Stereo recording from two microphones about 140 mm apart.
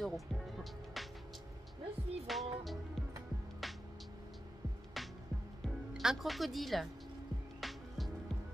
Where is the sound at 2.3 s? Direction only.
Centre (ahead or behind).